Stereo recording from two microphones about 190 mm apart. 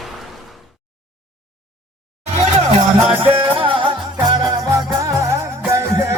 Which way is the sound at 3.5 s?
25° right (ahead or behind).